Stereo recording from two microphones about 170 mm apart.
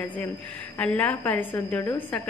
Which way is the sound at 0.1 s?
10° left (ahead or behind).